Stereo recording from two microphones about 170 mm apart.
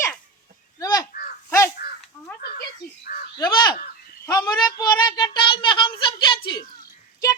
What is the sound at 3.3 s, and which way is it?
A child's voice, 25° left (ahead or behind).